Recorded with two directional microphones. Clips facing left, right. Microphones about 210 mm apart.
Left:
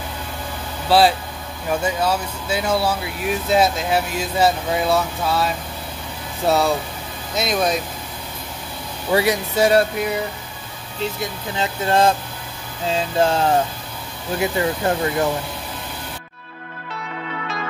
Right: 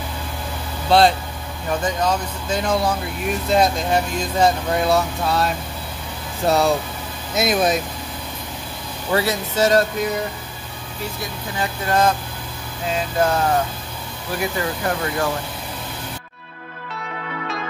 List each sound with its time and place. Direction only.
0.8 s speech: 5° left (ahead or behind)
9.1 s speech: 15° left (ahead or behind)
11.0 s speech: 20° left (ahead or behind)